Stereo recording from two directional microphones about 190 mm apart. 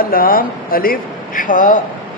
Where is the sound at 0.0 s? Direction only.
50° left (ahead or behind).